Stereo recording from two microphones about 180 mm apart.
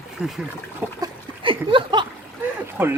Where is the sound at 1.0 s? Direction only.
30° right (ahead or behind).